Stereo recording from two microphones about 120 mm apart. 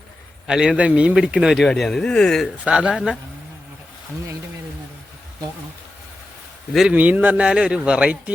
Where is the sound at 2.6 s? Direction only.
10° right (ahead or behind).